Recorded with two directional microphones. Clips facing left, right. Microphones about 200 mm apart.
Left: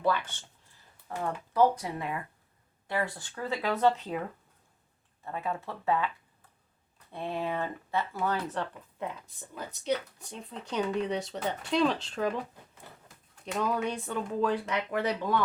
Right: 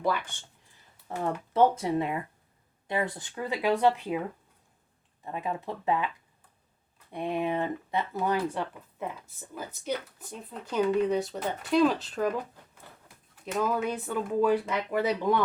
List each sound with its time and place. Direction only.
0.0 s speech: 15° right (ahead or behind)
1.0 s speech: 25° right (ahead or behind)
5.2 s speech: 15° right (ahead or behind)
7.1 s speech: 15° right (ahead or behind)
13.4 s speech: centre (ahead or behind)